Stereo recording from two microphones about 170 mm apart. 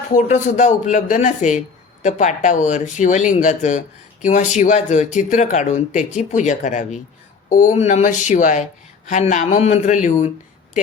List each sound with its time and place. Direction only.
0.1 s speech: 45° left (ahead or behind)